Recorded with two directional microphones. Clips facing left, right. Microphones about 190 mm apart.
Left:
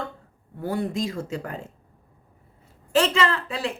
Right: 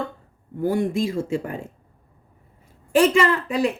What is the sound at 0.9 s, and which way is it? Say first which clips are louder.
Speech: right 5 dB; 10° right (ahead or behind).